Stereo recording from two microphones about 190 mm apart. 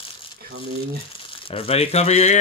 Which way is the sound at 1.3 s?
30° left (ahead or behind).